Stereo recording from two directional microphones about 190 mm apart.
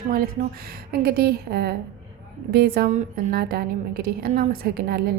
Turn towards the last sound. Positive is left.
turn(degrees=-55)  # may be behind; listen again after turning